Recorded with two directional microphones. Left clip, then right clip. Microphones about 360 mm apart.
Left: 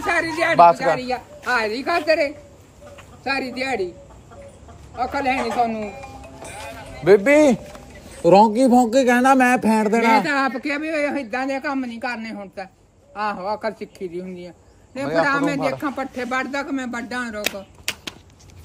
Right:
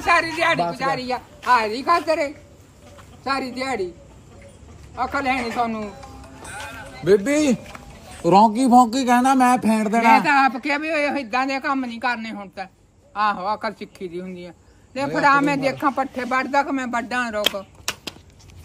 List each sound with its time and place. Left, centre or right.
0.0 s a sound: centre
0.9 s a man's voice: centre
4.9 s a man's voice: centre
7.0 s a man's voice: centre
13.4 s speech: right
13.7 s a man's voice: centre